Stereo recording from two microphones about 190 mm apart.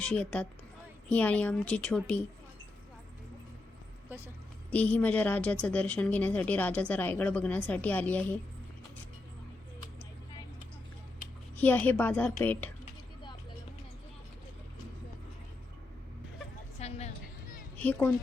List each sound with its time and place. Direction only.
0.0 s a woman's voice: 5° left (ahead or behind)
4.1 s a woman's voice: 10° right (ahead or behind)
4.7 s a woman's voice: 10° left (ahead or behind)
11.5 s a woman's voice: 10° left (ahead or behind)
16.8 s a sound: 35° left (ahead or behind)
17.7 s a child's voice: 10° left (ahead or behind)